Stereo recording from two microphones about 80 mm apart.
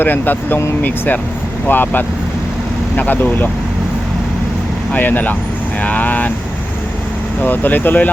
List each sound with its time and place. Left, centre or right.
0.0 s speech: left
4.9 s speech: left
7.4 s speech: left